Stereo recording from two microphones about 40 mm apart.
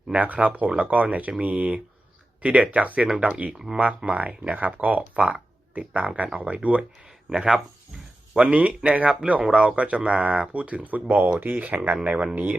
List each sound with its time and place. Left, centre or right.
0.1 s speech: right
6.2 s speech: right
7.3 s speech: centre
8.3 s speech: right
11.1 s speech: right
11.5 s speech: right